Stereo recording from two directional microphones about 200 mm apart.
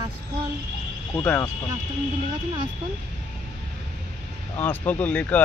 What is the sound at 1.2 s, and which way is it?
Speech, 10° left (ahead or behind).